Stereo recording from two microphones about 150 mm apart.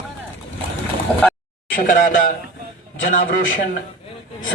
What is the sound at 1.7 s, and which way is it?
A man's voice, 65° left (ahead or behind).